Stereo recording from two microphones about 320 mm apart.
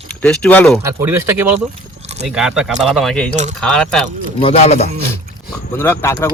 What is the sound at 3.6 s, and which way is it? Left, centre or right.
Speech, centre.